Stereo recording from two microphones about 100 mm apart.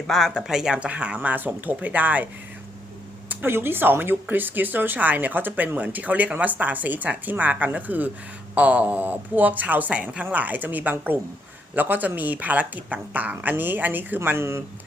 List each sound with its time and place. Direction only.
0.1 s speech: centre (ahead or behind); by 14.6 s 25° right (ahead or behind)